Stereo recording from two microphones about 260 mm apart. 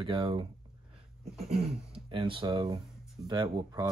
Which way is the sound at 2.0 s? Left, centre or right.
Centre.